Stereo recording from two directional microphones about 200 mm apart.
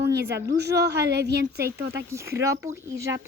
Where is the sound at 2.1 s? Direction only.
15° right (ahead or behind).